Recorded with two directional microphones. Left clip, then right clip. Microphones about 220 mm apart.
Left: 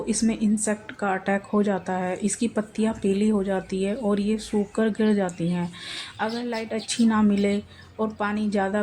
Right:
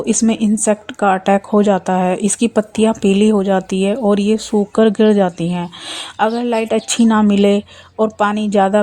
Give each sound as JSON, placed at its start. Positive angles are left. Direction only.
{"t": 0.0, "sound": "speech", "side_deg": -40}